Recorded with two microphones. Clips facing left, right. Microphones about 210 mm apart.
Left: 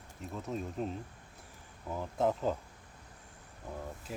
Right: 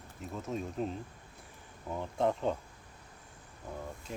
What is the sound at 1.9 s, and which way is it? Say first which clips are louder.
Speech: even; 5° left (ahead or behind).